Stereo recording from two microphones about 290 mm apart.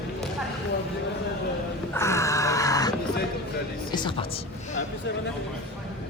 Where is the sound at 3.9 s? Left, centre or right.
Centre.